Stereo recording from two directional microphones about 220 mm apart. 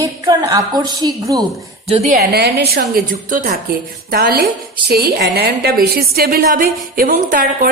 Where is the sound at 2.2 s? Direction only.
45° right (ahead or behind).